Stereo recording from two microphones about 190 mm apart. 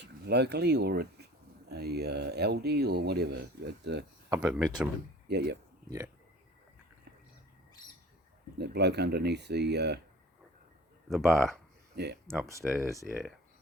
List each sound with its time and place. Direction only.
0.0 s speech: 60° right (ahead or behind)
4.4 s speech: 5° right (ahead or behind)
5.3 s speech: 60° right (ahead or behind)
8.5 s speech: 60° right (ahead or behind)
11.1 s speech: centre (ahead or behind)
11.9 s speech: 60° right (ahead or behind)
12.6 s speech: centre (ahead or behind)